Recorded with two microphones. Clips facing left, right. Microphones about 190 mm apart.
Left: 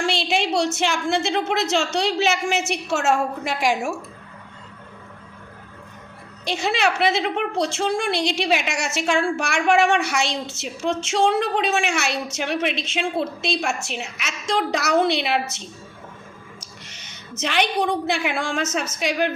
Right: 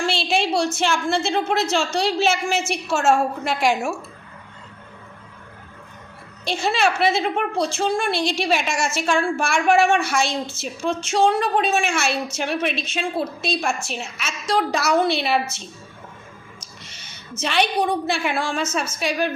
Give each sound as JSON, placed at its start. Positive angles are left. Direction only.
{"t": 0.1, "sound": "a woman's voice", "side_deg": 20}
{"t": 6.4, "sound": "a woman's voice", "side_deg": 20}
{"t": 16.6, "sound": "a sound", "side_deg": 15}
{"t": 17.5, "sound": "a woman's voice", "side_deg": 15}